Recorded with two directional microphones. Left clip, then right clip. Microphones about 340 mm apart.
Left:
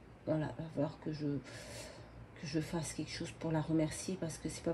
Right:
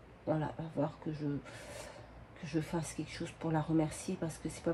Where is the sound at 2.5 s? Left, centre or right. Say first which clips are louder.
Right 2 dB; centre.